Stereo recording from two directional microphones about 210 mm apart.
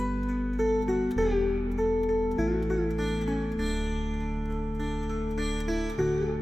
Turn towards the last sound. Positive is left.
turn(degrees=0)  # may be behind; listen again after turning